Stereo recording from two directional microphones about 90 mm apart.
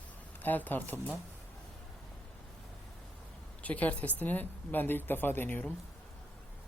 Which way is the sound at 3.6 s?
15° left (ahead or behind).